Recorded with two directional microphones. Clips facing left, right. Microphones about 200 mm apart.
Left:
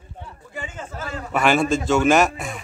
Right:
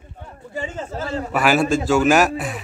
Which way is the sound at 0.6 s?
30° right (ahead or behind).